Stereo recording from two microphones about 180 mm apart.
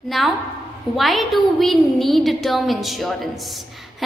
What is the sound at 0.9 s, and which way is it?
A woman's voice, centre (ahead or behind).